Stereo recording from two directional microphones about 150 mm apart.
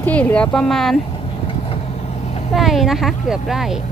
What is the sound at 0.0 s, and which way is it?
Speech, 10° left (ahead or behind).